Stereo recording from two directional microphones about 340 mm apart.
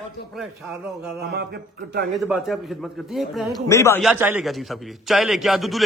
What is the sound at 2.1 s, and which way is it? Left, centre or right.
A man's voice, centre.